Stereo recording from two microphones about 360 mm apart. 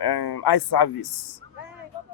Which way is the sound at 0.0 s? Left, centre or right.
Left.